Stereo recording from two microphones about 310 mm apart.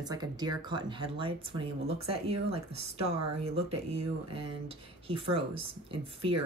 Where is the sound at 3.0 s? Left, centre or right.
Right.